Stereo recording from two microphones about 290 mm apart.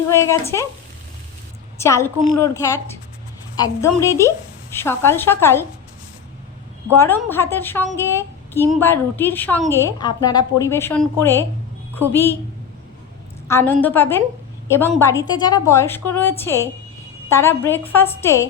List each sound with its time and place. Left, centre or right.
0.1 s a woman's voice: centre
1.8 s a woman's voice: centre
6.9 s a woman's voice: centre
13.5 s a woman's voice: centre